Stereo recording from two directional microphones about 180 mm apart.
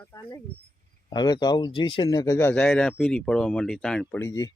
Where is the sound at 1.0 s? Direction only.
25° left (ahead or behind); by 4.2 s 5° left (ahead or behind).